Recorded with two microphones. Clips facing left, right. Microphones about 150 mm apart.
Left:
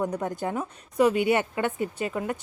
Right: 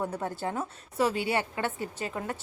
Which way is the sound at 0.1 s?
15° left (ahead or behind).